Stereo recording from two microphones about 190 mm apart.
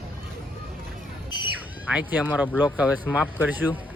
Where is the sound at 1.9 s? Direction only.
10° right (ahead or behind).